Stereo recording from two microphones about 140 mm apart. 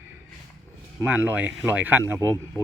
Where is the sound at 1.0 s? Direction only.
15° right (ahead or behind).